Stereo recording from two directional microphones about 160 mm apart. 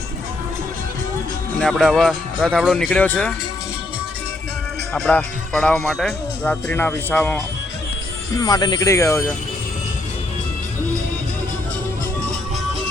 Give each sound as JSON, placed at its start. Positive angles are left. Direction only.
{"t": 1.5, "sound": "speech", "side_deg": 5}
{"t": 4.9, "sound": "speech", "side_deg": 5}
{"t": 8.4, "sound": "speech", "side_deg": 25}